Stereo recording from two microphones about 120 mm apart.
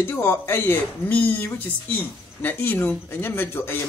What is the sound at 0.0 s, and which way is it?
Speech, 20° left (ahead or behind).